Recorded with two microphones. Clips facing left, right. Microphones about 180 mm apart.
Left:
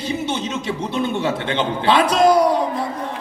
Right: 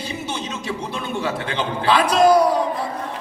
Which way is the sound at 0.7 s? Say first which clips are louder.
Left 5 dB; 25° left (ahead or behind).